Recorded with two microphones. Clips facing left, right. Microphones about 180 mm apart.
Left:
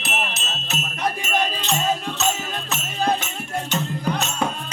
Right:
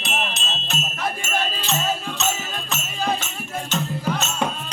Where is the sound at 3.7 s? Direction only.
15° left (ahead or behind).